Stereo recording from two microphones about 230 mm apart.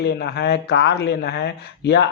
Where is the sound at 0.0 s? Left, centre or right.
Left.